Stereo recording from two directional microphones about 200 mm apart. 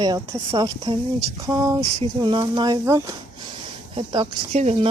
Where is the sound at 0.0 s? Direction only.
20° right (ahead or behind).